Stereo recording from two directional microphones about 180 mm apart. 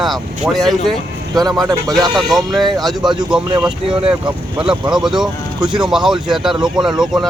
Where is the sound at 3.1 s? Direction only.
25° right (ahead or behind).